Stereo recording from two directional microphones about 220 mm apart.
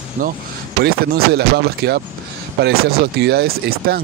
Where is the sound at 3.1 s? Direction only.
50° right (ahead or behind).